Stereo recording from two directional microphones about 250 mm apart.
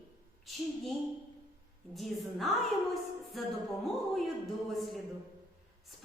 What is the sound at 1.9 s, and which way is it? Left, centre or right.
A woman's voice, centre.